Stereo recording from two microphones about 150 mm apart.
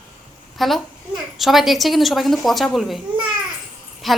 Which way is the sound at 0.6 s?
Centre (ahead or behind).